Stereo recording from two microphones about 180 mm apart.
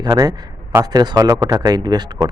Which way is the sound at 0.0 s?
20° right (ahead or behind).